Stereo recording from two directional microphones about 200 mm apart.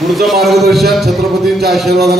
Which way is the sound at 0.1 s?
Centre (ahead or behind).